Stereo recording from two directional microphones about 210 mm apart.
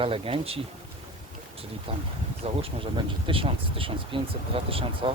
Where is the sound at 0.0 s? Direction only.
25° right (ahead or behind).